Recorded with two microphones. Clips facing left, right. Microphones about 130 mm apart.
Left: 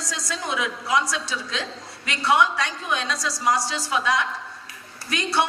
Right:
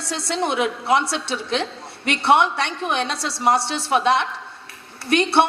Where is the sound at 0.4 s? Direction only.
60° right (ahead or behind).